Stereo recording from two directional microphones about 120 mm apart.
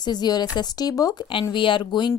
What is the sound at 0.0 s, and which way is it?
A woman's voice, 35° left (ahead or behind).